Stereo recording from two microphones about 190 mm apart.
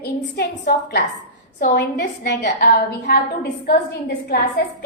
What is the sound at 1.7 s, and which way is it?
A woman's voice, 60° left (ahead or behind).